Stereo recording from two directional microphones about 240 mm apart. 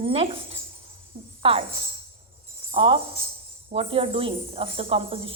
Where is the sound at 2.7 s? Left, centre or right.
Right.